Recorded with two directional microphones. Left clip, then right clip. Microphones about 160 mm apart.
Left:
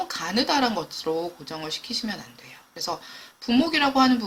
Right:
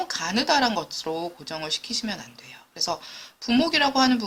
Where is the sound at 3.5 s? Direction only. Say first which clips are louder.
Even; 35° right (ahead or behind).